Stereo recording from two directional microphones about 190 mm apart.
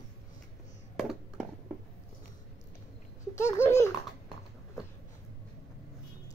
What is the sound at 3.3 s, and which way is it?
Babbling, 15° left (ahead or behind).